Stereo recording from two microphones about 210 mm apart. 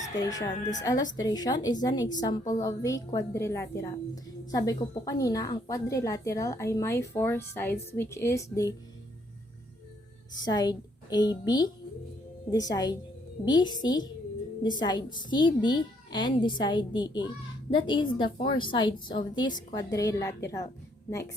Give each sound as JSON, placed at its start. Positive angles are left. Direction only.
{"t": 0.2, "sound": "a woman's voice", "side_deg": 20}
{"t": 10.4, "sound": "a woman's voice", "side_deg": 20}